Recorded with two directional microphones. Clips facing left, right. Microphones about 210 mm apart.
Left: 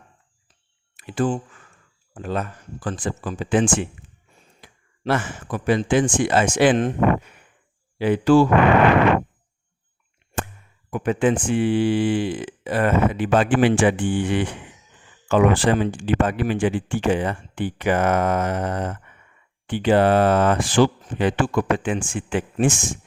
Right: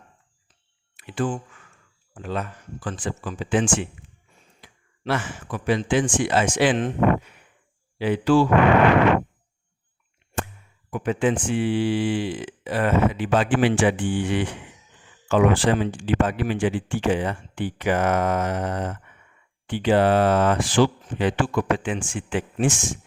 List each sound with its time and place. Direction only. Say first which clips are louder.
0.9 s speech: left 3 dB; 40° left (ahead or behind)
7.9 s speech: left 3 dB; 50° left (ahead or behind)
10.9 s speech: left 2 dB; 50° left (ahead or behind)